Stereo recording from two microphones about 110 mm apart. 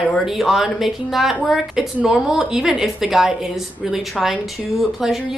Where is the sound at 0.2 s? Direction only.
Centre (ahead or behind).